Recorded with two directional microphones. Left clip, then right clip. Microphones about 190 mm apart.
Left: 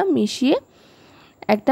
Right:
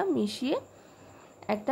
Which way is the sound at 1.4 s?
50° left (ahead or behind).